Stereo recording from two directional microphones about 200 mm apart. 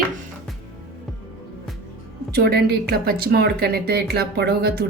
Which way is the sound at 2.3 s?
50° right (ahead or behind).